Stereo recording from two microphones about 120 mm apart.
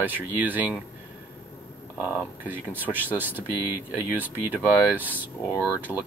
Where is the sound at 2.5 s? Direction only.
15° right (ahead or behind).